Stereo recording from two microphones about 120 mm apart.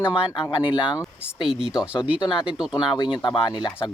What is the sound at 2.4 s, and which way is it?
Speech, 5° right (ahead or behind).